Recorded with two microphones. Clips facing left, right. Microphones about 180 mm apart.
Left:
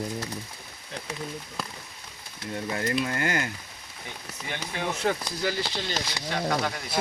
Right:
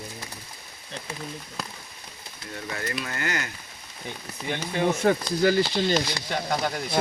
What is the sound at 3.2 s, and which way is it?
Speech, 50° left (ahead or behind).